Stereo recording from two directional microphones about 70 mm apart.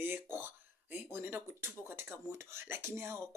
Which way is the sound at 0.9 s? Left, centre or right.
Right.